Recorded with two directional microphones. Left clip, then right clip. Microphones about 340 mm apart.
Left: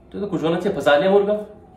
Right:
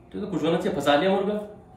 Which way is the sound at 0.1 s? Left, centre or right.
Centre.